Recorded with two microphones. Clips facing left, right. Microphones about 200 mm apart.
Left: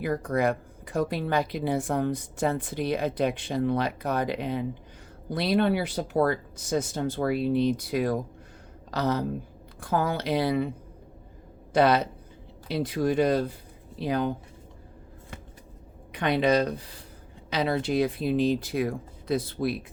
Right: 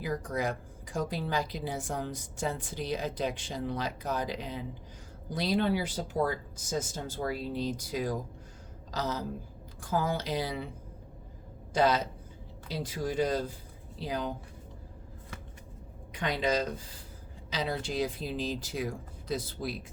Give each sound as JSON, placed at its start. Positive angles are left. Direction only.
{"t": 0.0, "sound": "speech", "side_deg": 60}
{"t": 11.7, "sound": "speech", "side_deg": 65}
{"t": 16.1, "sound": "speech", "side_deg": 65}